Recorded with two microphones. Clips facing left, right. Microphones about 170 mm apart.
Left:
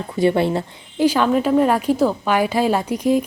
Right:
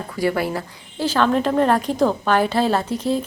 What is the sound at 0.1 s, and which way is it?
Speech, 25° left (ahead or behind).